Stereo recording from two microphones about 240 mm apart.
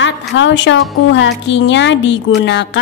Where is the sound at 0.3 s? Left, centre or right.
Left.